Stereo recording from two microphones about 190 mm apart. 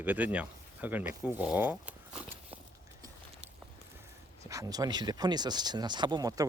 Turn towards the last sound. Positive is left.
turn(degrees=-20)  # may be behind; listen again after turning